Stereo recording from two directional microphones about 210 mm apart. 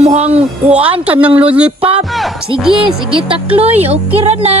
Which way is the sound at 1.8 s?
25° right (ahead or behind).